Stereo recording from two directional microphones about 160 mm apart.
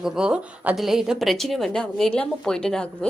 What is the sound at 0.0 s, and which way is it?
A woman's voice, 5° right (ahead or behind).